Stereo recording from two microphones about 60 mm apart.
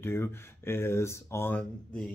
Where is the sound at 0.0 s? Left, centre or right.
Left.